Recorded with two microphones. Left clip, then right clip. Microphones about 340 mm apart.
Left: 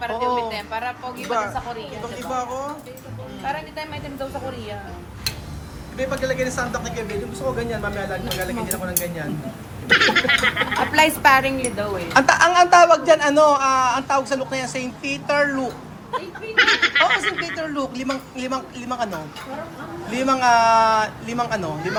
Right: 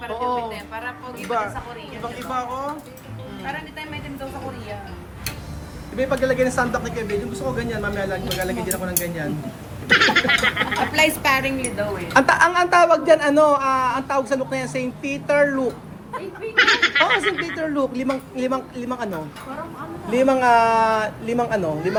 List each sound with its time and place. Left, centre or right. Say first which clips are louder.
0.5 s a sound: left 5 dB; centre
2.3 s speech: even; centre
6.0 s speech: right 3 dB; centre